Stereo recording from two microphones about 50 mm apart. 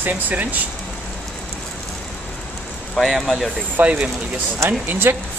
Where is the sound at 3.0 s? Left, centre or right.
Centre.